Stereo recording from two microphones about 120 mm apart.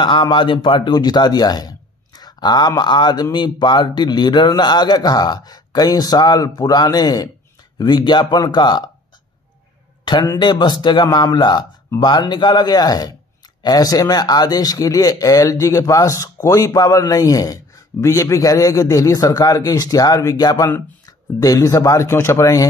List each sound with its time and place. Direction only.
0.0 s speech: 45° left (ahead or behind)
10.1 s a man's voice: 35° left (ahead or behind)